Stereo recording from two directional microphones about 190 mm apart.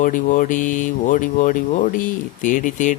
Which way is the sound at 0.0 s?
45° left (ahead or behind).